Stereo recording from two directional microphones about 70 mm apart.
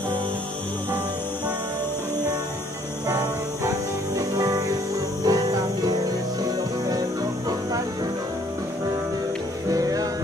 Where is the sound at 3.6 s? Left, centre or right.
Right.